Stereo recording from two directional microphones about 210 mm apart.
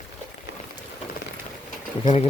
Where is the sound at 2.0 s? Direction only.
30° left (ahead or behind).